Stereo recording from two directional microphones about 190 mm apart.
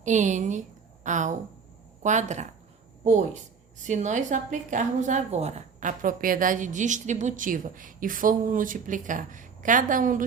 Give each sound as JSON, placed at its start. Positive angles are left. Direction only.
{"t": 0.0, "sound": "a woman's voice", "side_deg": -40}